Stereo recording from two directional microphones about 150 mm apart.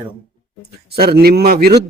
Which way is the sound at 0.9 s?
90° right.